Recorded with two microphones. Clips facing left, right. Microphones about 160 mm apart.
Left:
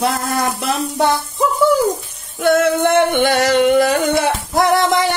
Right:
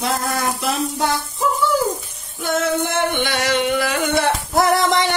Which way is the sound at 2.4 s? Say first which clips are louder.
Left 7 dB; 65° left (ahead or behind).